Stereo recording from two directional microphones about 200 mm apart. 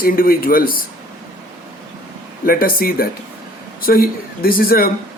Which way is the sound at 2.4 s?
45° left (ahead or behind).